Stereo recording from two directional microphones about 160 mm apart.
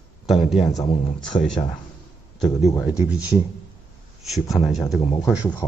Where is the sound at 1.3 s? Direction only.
40° left (ahead or behind).